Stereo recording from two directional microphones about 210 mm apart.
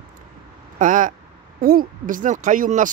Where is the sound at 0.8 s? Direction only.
40° right (ahead or behind).